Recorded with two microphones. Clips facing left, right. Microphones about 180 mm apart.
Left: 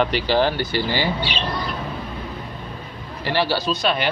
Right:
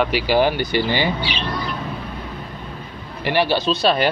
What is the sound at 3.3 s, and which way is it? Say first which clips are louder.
Speech: right 3 dB; 15° right (ahead or behind).